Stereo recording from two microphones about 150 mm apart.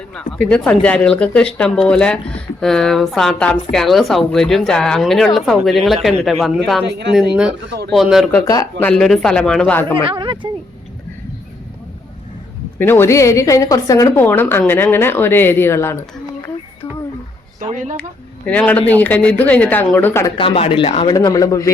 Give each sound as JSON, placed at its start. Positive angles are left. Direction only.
{"t": 0.1, "sound": "speech", "side_deg": 5}
{"t": 8.3, "sound": "speech", "side_deg": 20}
{"t": 8.8, "sound": "speech", "side_deg": 5}
{"t": 9.9, "sound": "speech", "side_deg": -30}
{"t": 12.8, "sound": "a woman's voice", "side_deg": 15}
{"t": 17.7, "sound": "speech", "side_deg": -55}
{"t": 18.4, "sound": "a woman's voice", "side_deg": 10}
{"t": 20.3, "sound": "speech", "side_deg": 40}